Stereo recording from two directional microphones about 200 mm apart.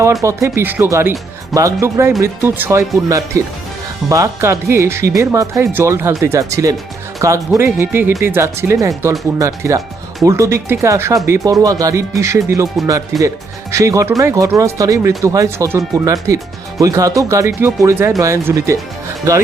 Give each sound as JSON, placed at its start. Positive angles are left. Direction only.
{"t": 0.0, "sound": "speech", "side_deg": -15}